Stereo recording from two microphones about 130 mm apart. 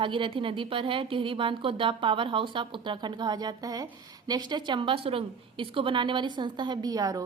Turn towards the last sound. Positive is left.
turn(degrees=-30)  # may be behind; listen again after turning